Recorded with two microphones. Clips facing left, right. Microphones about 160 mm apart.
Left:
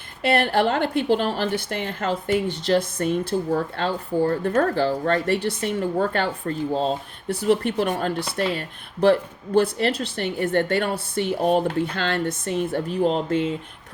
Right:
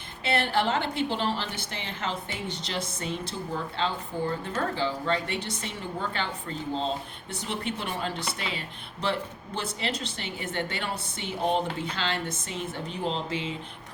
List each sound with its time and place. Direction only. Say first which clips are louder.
0.2 s a woman's voice: left 6 dB; 50° left (ahead or behind)